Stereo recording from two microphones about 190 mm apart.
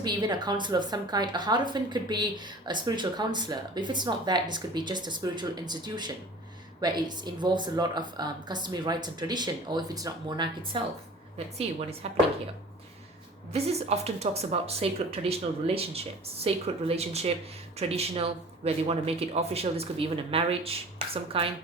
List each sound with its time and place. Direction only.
0.0 s a woman's voice: 20° right (ahead or behind)
13.5 s speech: 35° right (ahead or behind)